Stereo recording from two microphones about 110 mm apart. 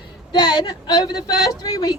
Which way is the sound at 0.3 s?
35° left (ahead or behind).